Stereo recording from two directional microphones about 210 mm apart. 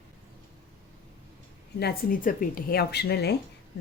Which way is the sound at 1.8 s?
40° left (ahead or behind).